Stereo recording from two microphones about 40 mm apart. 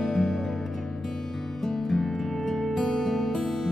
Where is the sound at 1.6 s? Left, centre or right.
Centre.